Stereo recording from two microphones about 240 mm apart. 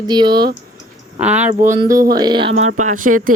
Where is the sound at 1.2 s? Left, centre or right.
Centre.